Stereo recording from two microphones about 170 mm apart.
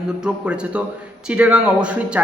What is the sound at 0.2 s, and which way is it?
Speech, 5° right (ahead or behind).